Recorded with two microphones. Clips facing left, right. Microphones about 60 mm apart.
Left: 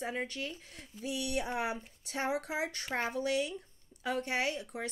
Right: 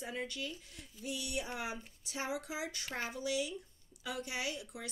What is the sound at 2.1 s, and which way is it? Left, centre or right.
A woman's voice, left.